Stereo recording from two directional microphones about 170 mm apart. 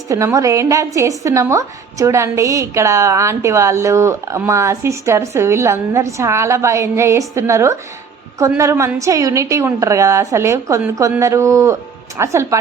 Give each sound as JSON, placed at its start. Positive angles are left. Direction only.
{"t": 0.3, "sound": "a woman's voice", "side_deg": -20}